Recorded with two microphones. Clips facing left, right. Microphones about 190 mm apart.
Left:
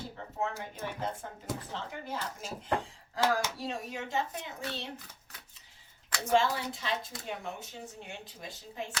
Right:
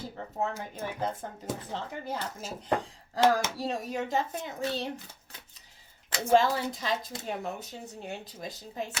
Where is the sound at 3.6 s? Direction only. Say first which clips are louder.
Right 5 dB; 40° right (ahead or behind).